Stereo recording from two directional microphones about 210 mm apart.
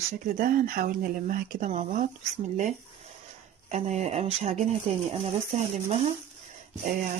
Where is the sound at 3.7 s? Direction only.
30° right (ahead or behind).